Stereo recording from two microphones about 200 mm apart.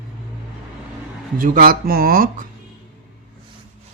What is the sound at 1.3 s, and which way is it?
Speech, 45° right (ahead or behind).